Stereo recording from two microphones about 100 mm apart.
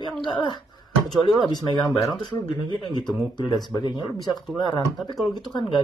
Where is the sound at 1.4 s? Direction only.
45° left (ahead or behind).